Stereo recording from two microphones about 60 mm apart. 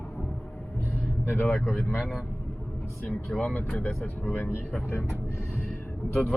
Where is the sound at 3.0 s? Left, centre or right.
Centre.